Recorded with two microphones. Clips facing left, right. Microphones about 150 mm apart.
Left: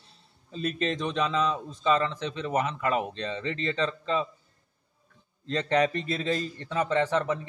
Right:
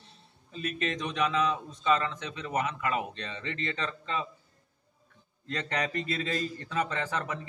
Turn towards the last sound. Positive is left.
turn(degrees=25)  # may be behind; listen again after turning